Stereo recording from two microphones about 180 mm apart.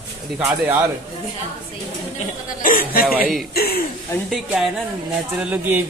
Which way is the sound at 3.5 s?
60° left (ahead or behind).